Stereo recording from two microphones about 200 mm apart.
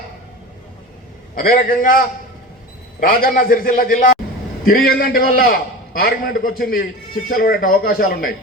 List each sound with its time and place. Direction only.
1.4 s a man's voice: 45° left (ahead or behind)